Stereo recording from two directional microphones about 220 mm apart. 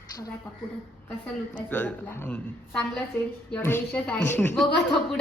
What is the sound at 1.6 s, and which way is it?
A woman's voice, 10° left (ahead or behind).